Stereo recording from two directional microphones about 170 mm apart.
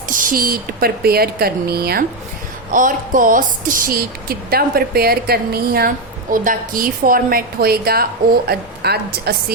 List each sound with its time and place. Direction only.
0.1 s speech: 55° right (ahead or behind)
2.7 s speech: 50° right (ahead or behind)
6.3 s a woman's voice: 55° right (ahead or behind); by 9.3 s 70° right (ahead or behind)